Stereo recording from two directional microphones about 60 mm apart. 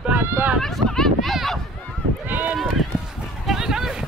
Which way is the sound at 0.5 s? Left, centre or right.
Centre.